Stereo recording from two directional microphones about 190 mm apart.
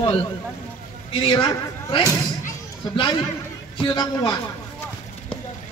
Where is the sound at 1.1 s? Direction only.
25° left (ahead or behind).